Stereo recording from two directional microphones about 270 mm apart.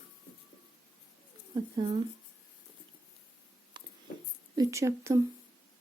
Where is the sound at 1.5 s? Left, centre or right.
Centre.